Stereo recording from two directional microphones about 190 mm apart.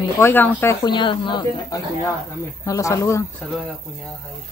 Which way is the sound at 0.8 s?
25° left (ahead or behind).